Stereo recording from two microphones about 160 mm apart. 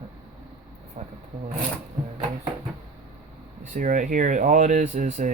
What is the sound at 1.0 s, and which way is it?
Speech, 50° right (ahead or behind).